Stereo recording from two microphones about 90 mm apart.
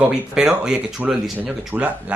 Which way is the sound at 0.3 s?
5° right (ahead or behind).